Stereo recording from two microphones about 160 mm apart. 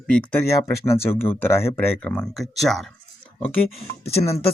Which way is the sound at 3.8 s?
40° left (ahead or behind).